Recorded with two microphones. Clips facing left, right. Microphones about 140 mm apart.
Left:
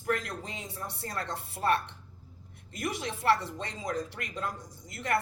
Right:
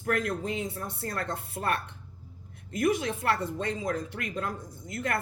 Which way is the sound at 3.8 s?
55° right (ahead or behind).